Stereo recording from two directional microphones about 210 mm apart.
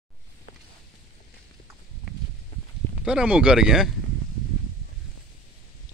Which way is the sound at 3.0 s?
5° right (ahead or behind).